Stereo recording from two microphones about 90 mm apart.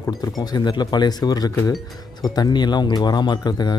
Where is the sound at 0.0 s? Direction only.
45° left (ahead or behind).